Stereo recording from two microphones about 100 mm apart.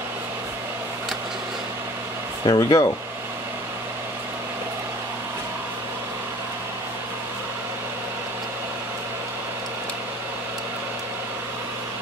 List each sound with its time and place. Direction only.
2.4 s speech: 40° left (ahead or behind)